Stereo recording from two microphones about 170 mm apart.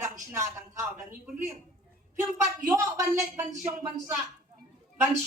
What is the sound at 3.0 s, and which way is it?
A woman's voice, 20° right (ahead or behind).